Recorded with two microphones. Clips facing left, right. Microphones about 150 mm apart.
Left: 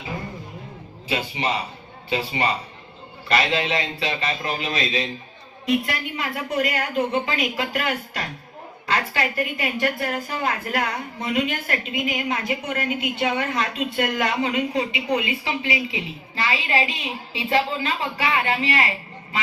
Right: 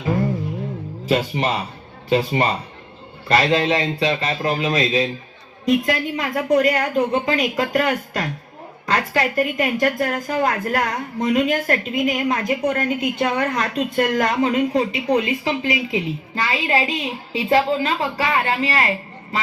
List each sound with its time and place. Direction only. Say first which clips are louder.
1.0 s a woman's voice: right 5 dB; 45° right (ahead or behind)